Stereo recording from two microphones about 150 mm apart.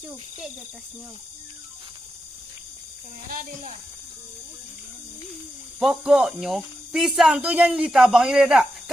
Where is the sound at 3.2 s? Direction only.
70° right (ahead or behind).